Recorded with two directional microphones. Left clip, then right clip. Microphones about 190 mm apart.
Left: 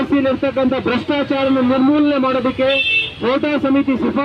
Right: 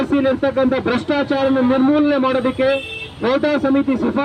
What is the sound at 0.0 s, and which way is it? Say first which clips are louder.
Speech: even; 30° left (ahead or behind).